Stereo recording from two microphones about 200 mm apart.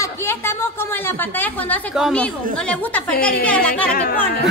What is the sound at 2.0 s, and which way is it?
A woman's voice, 5° left (ahead or behind).